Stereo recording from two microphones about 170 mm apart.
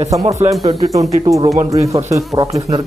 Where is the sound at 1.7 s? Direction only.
20° right (ahead or behind).